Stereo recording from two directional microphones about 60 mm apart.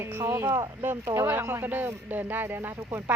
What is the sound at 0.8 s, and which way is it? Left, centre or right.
Speech, right.